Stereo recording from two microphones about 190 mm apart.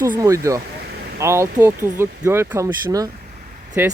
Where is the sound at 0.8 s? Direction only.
60° right (ahead or behind).